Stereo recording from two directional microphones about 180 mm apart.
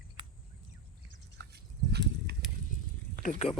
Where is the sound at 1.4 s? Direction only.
65° right (ahead or behind).